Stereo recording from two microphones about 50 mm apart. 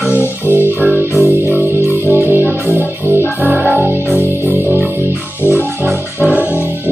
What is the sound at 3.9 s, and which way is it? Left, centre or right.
Music, left.